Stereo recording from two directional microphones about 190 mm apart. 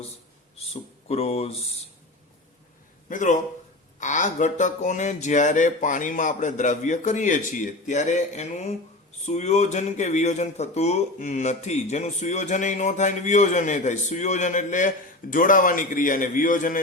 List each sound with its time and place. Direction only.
0.5 s speech: 35° left (ahead or behind)
3.1 s speech: 40° left (ahead or behind)